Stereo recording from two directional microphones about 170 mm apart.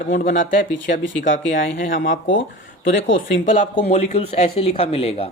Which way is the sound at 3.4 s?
45° left (ahead or behind).